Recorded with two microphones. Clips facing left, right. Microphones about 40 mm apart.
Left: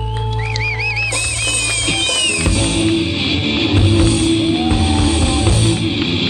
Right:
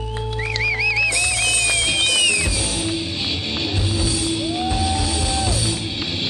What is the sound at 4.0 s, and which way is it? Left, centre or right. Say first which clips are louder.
Music: left 8 dB; left.